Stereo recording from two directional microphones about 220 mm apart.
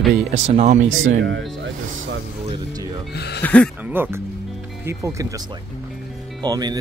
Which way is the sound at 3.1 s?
50° left (ahead or behind).